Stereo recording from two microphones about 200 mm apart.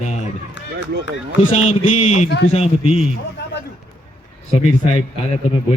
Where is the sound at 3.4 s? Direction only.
55° left (ahead or behind).